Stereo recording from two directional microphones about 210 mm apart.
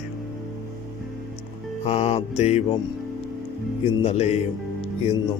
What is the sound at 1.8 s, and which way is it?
Mantra, 30° left (ahead or behind).